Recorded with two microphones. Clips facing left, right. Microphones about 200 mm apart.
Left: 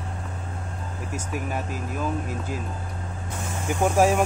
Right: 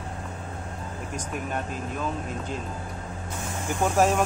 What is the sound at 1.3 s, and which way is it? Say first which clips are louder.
Speech: left 1 dB; 5° left (ahead or behind).